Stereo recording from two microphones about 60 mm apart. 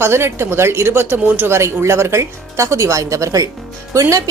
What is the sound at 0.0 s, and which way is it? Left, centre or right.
A woman's voice, right.